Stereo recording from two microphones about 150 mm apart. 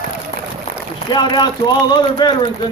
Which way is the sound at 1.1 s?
30° left (ahead or behind).